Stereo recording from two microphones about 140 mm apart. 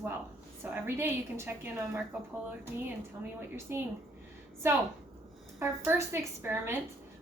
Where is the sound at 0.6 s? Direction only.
15° right (ahead or behind).